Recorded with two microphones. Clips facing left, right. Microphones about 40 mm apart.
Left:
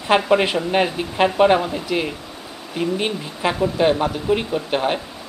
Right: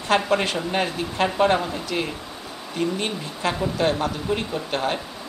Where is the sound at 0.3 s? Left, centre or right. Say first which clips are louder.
Left 5 dB; centre.